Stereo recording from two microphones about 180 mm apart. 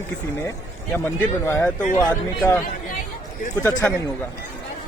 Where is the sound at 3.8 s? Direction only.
10° left (ahead or behind).